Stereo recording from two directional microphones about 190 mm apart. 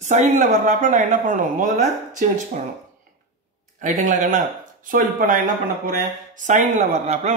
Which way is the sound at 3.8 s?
40° right (ahead or behind).